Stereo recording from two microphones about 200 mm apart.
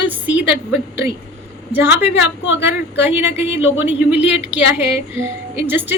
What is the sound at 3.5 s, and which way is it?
Speech, 70° left (ahead or behind).